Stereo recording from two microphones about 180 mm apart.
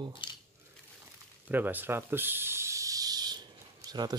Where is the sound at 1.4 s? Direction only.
10° right (ahead or behind).